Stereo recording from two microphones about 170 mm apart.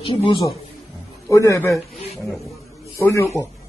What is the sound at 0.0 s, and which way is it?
Speech, 35° left (ahead or behind).